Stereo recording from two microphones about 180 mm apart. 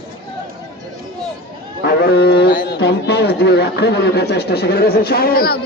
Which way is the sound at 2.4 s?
55° left (ahead or behind).